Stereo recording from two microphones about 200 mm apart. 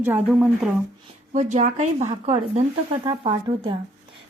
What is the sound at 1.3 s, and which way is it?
A woman's voice, 35° right (ahead or behind).